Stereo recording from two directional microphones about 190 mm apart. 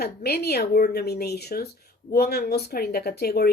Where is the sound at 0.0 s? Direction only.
55° left (ahead or behind).